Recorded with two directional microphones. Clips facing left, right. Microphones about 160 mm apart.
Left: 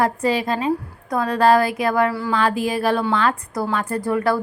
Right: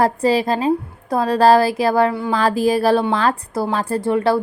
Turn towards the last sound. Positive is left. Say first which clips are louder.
# right 3 dB
turn(degrees=-25)  # may be behind; listen again after turning